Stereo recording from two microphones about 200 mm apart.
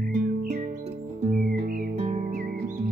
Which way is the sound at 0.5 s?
40° right (ahead or behind).